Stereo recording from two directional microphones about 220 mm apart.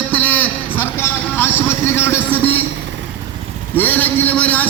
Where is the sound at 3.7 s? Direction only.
10° left (ahead or behind).